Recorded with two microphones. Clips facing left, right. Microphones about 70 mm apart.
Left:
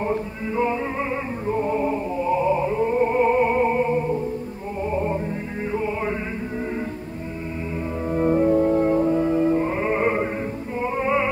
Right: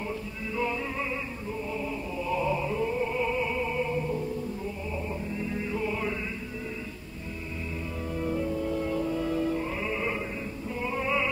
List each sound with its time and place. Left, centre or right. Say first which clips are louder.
0.0 s music: left 9 dB; left
4.9 s music: left 14 dB; left
5.7 s music: left 8 dB; left
8.1 s music: left 12 dB; left
10.8 s music: left 7 dB; left